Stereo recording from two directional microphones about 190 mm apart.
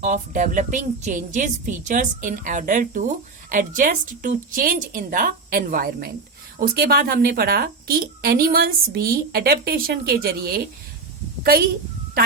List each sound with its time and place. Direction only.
0.0 s speech: 40° right (ahead or behind)